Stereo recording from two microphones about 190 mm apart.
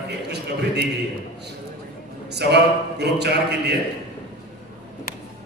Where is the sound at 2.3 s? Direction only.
60° right (ahead or behind).